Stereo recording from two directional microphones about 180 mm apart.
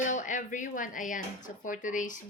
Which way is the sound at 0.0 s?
45° left (ahead or behind).